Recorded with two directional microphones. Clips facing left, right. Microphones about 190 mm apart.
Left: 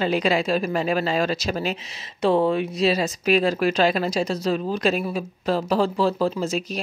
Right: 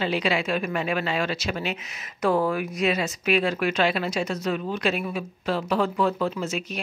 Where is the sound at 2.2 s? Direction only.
25° left (ahead or behind).